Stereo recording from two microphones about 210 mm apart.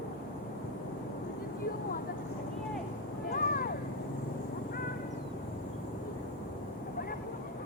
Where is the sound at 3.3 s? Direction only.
45° left (ahead or behind).